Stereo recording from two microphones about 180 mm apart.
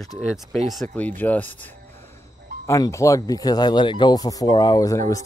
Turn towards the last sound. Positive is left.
turn(degrees=20)  # may be behind; listen again after turning